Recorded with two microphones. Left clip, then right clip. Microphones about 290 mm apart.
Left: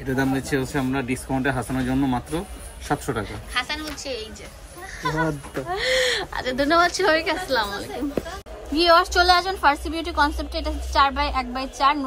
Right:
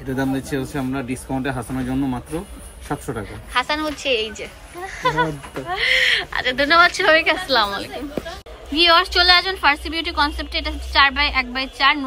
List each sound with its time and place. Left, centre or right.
0.0 s speech: centre
5.7 s a woman's voice: centre